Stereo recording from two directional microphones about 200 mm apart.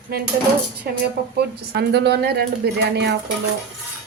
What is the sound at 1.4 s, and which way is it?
A woman's voice, 55° right (ahead or behind).